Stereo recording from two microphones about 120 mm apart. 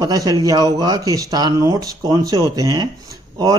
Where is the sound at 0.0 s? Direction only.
30° right (ahead or behind).